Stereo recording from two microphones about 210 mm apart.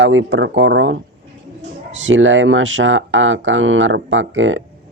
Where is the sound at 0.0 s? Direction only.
65° right (ahead or behind).